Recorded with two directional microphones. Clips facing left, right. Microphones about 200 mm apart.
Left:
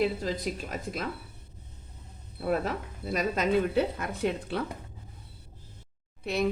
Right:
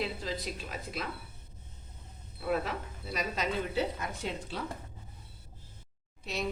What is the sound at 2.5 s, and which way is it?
Speech, 50° left (ahead or behind).